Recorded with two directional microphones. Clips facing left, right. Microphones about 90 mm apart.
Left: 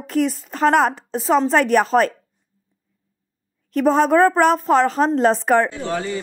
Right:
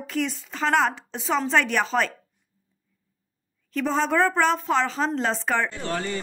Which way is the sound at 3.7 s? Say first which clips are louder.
Left 8 dB; 55° left (ahead or behind).